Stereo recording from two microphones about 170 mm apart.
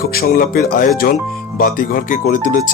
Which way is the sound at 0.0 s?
65° left (ahead or behind).